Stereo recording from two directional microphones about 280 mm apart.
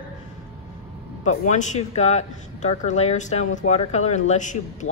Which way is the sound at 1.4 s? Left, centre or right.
Left.